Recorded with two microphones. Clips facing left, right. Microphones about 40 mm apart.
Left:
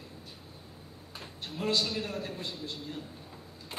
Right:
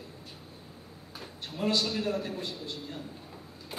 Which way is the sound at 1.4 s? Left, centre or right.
Centre.